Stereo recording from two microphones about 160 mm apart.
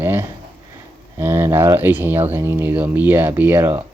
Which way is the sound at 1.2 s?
15° right (ahead or behind).